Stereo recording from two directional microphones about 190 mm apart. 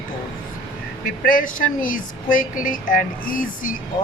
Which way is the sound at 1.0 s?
45° left (ahead or behind).